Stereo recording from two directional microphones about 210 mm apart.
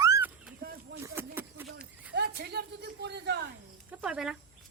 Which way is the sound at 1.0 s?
10° right (ahead or behind).